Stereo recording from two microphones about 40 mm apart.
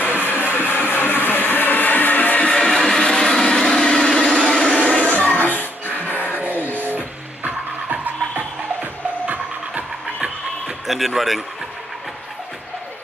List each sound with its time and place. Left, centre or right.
0.3 s music: left
2.5 s vehicle: centre
4.5 s a sound: left
5.1 s music: left
5.4 s music: left
6.3 s music: right
10.9 s speech: centre